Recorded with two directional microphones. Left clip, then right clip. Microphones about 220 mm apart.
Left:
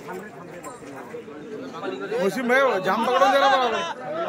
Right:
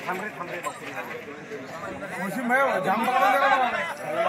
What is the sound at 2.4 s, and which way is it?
A man's voice, 20° left (ahead or behind).